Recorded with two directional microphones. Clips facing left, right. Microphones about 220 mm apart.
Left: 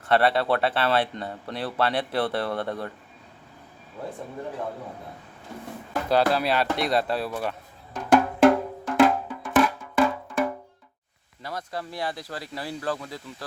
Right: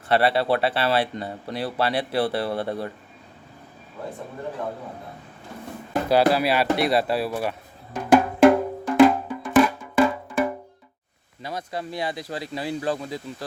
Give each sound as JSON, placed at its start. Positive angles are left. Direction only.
{"t": 0.1, "sound": "speech", "side_deg": -10}
{"t": 6.1, "sound": "speech", "side_deg": -10}
{"t": 7.9, "sound": "music", "side_deg": -5}
{"t": 11.4, "sound": "speech", "side_deg": -20}